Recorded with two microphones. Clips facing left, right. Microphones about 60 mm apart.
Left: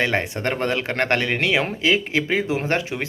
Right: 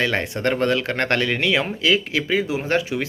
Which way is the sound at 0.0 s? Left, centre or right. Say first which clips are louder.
Right 1 dB; left.